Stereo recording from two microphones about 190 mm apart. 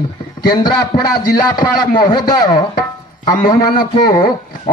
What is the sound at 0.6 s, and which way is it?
A man's voice, 20° left (ahead or behind).